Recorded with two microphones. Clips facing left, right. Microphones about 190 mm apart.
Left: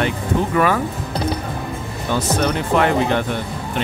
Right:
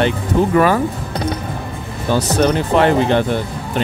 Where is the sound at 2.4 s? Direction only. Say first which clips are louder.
Right 4 dB; 30° right (ahead or behind).